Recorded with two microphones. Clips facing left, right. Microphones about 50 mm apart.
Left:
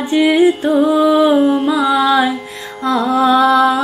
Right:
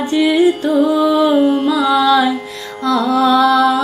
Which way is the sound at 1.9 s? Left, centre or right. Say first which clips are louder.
Right 2 dB; centre.